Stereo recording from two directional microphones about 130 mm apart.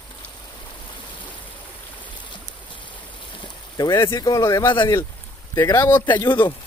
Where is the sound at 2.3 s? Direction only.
40° left (ahead or behind).